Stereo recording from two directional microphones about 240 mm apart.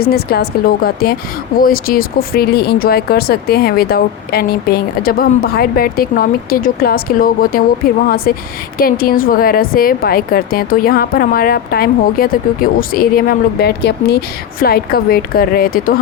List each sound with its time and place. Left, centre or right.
0.0 s a woman's voice: left